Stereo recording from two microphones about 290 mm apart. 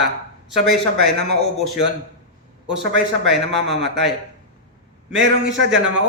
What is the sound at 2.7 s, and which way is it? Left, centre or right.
Speech, right.